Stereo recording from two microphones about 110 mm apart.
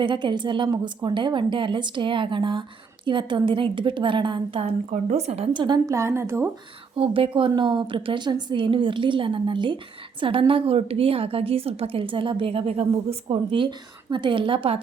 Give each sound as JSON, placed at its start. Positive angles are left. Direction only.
{"t": 0.0, "sound": "a woman's voice", "side_deg": -45}
{"t": 4.6, "sound": "a woman's voice", "side_deg": -75}
{"t": 5.5, "sound": "a woman's voice", "side_deg": -40}
{"t": 6.9, "sound": "a woman's voice", "side_deg": -55}